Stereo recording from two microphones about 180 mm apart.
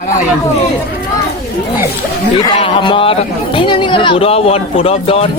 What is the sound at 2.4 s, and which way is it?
Speech, 30° left (ahead or behind).